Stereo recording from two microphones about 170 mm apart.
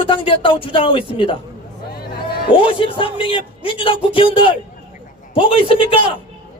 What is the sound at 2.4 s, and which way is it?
Speech, 30° left (ahead or behind).